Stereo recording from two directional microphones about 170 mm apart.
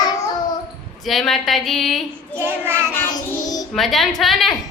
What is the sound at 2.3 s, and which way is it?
Child singing, 15° right (ahead or behind).